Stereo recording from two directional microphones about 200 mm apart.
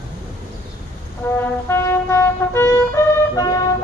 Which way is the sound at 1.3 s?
10° left (ahead or behind).